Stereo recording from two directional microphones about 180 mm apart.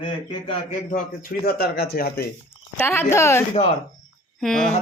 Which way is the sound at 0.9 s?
50° left (ahead or behind).